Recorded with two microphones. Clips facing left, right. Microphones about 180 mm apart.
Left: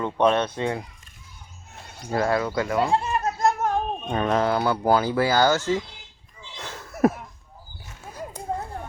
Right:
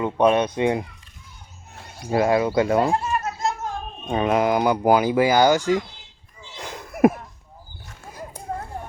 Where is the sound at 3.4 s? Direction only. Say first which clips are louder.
Left 4 dB; 55° left (ahead or behind).